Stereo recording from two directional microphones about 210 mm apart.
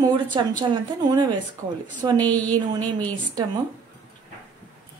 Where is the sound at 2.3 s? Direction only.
5° left (ahead or behind).